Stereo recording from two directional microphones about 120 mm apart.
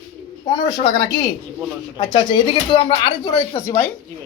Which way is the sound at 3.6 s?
25° left (ahead or behind).